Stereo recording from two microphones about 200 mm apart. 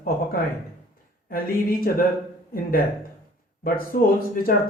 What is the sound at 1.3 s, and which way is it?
Speech, 45° left (ahead or behind).